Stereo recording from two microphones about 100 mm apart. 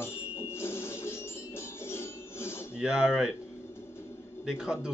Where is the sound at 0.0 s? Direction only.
25° left (ahead or behind).